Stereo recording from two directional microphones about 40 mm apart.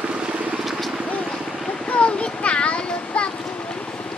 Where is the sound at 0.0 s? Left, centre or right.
Right.